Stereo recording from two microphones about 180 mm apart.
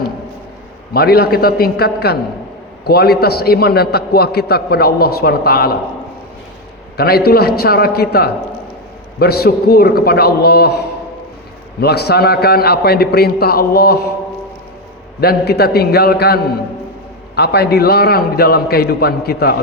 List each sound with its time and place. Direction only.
0.9 s a man's voice: 60° left (ahead or behind)
6.9 s a man's voice: 60° left (ahead or behind)
11.8 s a man's voice: 65° left (ahead or behind)
15.2 s a man's voice: 60° left (ahead or behind)